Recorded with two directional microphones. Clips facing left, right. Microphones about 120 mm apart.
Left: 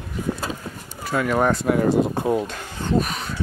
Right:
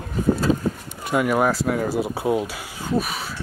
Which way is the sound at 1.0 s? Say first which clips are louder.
Right 1 dB; 10° right (ahead or behind).